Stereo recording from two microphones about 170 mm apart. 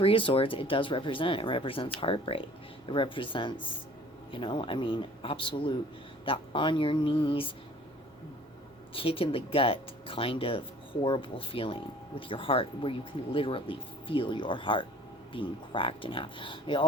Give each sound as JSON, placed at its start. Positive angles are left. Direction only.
{"t": 0.0, "sound": "a man's voice", "side_deg": 30}
{"t": 9.0, "sound": "speech", "side_deg": 30}